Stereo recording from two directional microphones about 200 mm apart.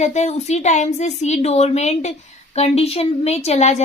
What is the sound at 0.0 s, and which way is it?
A woman's voice, 35° left (ahead or behind).